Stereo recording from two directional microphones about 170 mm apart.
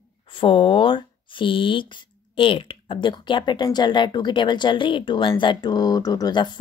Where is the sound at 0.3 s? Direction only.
30° left (ahead or behind).